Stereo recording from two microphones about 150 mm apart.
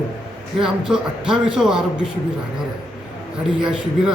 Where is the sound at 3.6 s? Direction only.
5° right (ahead or behind).